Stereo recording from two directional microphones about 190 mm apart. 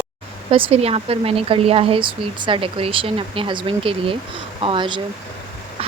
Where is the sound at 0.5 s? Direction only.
30° right (ahead or behind).